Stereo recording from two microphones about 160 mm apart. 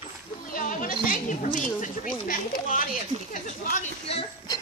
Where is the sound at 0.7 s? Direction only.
55° left (ahead or behind).